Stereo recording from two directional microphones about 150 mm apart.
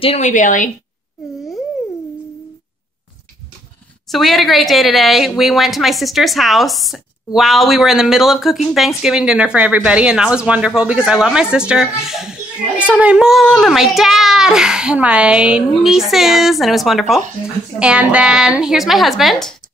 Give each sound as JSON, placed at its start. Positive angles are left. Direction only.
{"t": 0.0, "sound": "a woman's voice", "side_deg": 40}
{"t": 0.3, "sound": "a woman's voice", "side_deg": 60}
{"t": 4.1, "sound": "speech", "side_deg": 0}